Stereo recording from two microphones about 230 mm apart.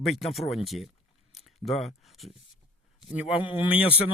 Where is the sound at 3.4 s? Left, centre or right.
Left.